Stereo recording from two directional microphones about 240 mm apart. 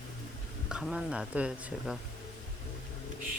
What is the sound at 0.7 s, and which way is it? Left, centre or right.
Speech, centre.